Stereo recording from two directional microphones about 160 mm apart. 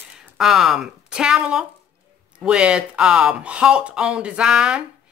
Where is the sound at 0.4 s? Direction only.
Centre (ahead or behind).